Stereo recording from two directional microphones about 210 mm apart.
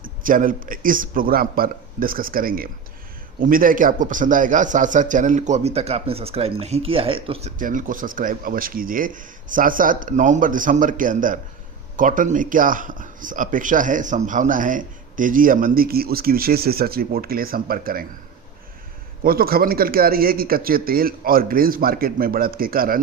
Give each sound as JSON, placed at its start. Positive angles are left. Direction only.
{"t": 0.0, "sound": "a man's voice", "side_deg": -40}
{"t": 19.2, "sound": "a man's voice", "side_deg": -45}